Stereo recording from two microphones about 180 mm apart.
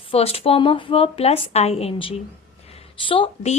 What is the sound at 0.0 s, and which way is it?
A woman's voice, 30° left (ahead or behind).